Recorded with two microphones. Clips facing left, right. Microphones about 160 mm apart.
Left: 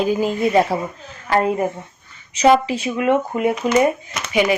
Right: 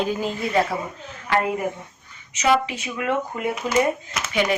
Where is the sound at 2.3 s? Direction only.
30° left (ahead or behind).